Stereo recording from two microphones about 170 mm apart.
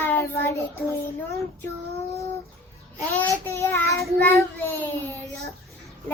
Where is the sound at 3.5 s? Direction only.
15° left (ahead or behind).